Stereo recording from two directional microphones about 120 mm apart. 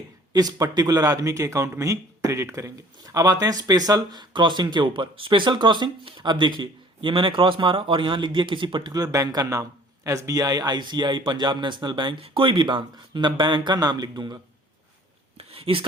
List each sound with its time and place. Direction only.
0.3 s speech: 35° right (ahead or behind)
15.4 s speech: 55° right (ahead or behind)